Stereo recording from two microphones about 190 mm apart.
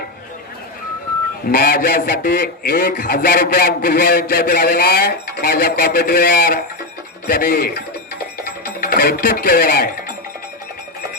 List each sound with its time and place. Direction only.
1.5 s a man's voice: 50° left (ahead or behind)
7.3 s music: 55° left (ahead or behind)